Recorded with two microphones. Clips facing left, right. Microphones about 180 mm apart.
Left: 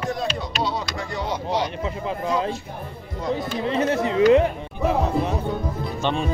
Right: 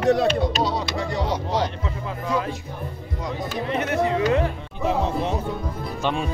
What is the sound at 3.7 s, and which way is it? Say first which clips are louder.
Speech: even; 30° left (ahead or behind).